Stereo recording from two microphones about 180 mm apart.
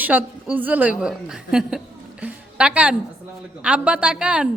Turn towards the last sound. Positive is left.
turn(degrees=-5)  # may be behind; listen again after turning